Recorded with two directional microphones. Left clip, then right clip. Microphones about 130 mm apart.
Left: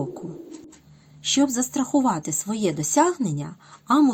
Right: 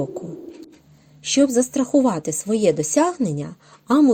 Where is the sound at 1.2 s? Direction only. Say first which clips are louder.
Right 5 dB; 15° right (ahead or behind).